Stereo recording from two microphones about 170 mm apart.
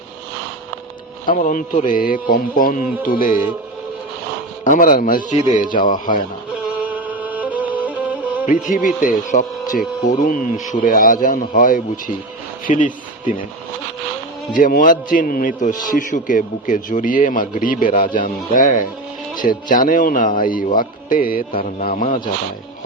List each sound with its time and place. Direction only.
1.2 s a man's voice: 55° left (ahead or behind)
4.6 s a man's voice: 50° left (ahead or behind)
6.5 s music: 10° right (ahead or behind)
8.4 s a man's voice: 50° left (ahead or behind)
14.5 s a man's voice: 55° left (ahead or behind)